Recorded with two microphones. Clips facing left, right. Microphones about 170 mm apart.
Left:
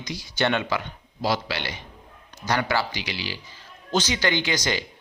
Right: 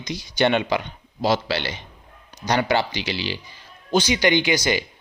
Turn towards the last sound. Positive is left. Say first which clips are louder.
# right 5 dB
turn(degrees=-10)  # may be behind; listen again after turning